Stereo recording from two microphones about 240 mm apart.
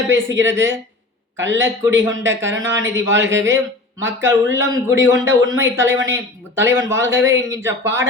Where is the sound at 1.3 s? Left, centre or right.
Right.